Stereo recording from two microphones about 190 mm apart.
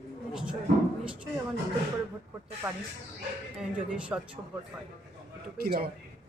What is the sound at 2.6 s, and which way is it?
Speech, 10° right (ahead or behind).